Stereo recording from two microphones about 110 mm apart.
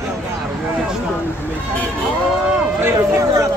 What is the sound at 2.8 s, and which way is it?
Speech, 30° right (ahead or behind).